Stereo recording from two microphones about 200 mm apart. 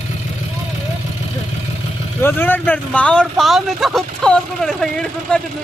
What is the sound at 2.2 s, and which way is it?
Speech, 10° left (ahead or behind).